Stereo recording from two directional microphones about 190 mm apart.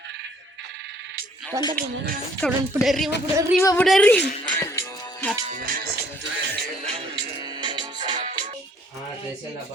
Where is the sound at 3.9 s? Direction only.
5° left (ahead or behind).